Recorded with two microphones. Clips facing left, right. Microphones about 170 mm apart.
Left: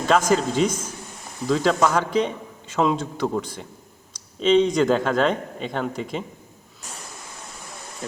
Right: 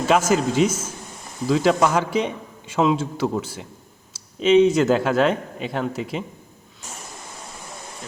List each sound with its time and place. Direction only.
0.1 s a man's voice: 10° right (ahead or behind)